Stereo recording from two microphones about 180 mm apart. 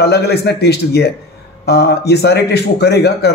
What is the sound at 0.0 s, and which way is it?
A man's voice, 65° left (ahead or behind).